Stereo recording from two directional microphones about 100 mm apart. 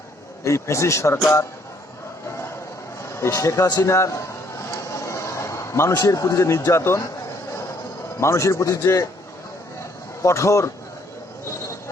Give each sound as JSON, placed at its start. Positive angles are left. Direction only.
{"t": 0.4, "sound": "a man's voice", "side_deg": 30}
{"t": 3.2, "sound": "a man's voice", "side_deg": 30}
{"t": 4.7, "sound": "a sound", "side_deg": 30}
{"t": 6.0, "sound": "a man's voice", "side_deg": 30}
{"t": 8.2, "sound": "a man's voice", "side_deg": 30}
{"t": 10.2, "sound": "a man's voice", "side_deg": 30}